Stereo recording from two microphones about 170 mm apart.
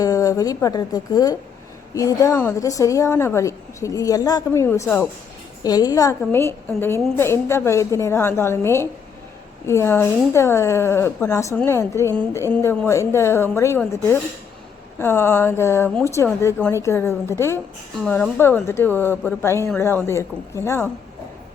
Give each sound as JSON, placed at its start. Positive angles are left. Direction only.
{"t": 0.0, "sound": "a woman's voice", "side_deg": 20}